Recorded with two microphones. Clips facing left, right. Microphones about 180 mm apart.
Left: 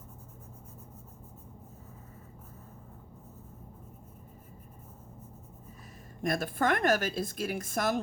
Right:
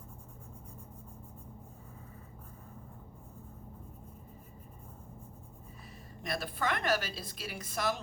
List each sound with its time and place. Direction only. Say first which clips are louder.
6.2 s a woman's voice: left 6 dB; 50° left (ahead or behind)